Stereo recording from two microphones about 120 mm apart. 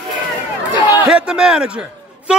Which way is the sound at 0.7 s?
40° left (ahead or behind).